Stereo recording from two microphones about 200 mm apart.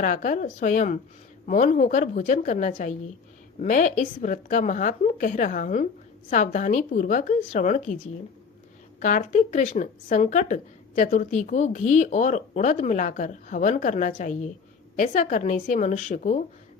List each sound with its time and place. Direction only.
0.0 s speech: 40° left (ahead or behind)
9.0 s speech: 40° left (ahead or behind)